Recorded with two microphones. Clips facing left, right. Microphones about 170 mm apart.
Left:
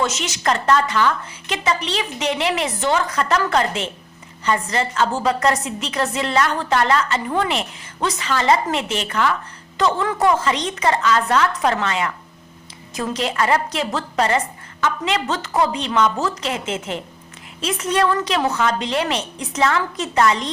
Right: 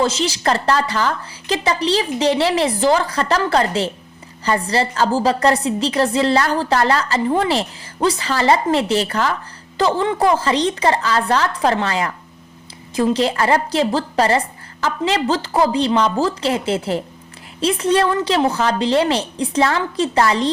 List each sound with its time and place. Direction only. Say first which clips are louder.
0.0 s a woman's voice: right 4 dB; 30° right (ahead or behind)